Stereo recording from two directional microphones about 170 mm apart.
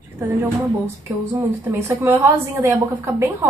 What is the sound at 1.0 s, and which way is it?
A woman's voice, 15° right (ahead or behind).